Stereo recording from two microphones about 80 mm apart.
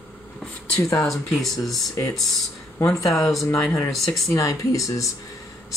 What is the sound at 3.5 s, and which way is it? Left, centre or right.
Speech, centre.